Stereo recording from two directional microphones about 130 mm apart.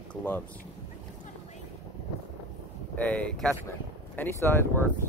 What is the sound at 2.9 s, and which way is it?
Speech, 10° left (ahead or behind).